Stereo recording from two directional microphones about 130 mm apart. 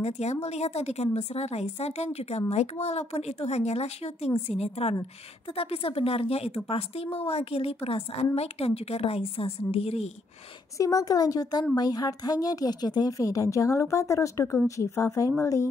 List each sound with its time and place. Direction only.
0.0 s a woman's voice: 55° left (ahead or behind)
10.8 s speech: 25° left (ahead or behind)